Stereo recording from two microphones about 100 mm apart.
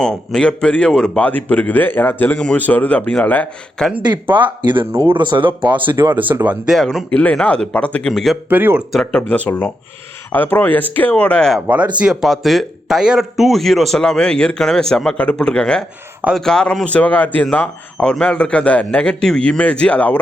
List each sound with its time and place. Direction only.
0.0 s a man's voice: 5° left (ahead or behind)
4.0 s speech: 50° right (ahead or behind)
6.0 s speech: 20° right (ahead or behind)
6.7 s a man's voice: centre (ahead or behind)
7.1 s a man's voice: 15° left (ahead or behind)
8.4 s speech: 20° right (ahead or behind)
8.9 s a man's voice: 5° left (ahead or behind)
11.9 s a man's voice: 5° right (ahead or behind); by 20.1 s 15° left (ahead or behind)